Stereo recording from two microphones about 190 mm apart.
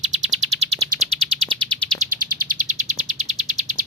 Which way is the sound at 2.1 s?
50° right (ahead or behind).